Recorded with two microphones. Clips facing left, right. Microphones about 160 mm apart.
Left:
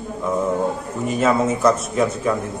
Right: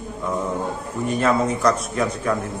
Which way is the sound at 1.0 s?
5° left (ahead or behind).